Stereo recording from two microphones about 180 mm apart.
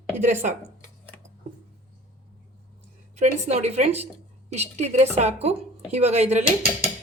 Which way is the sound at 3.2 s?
35° right (ahead or behind).